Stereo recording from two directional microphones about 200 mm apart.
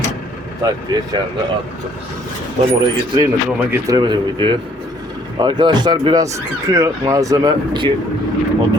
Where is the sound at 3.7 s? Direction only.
20° right (ahead or behind).